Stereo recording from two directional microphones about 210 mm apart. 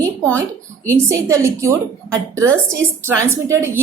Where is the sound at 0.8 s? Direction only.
15° right (ahead or behind).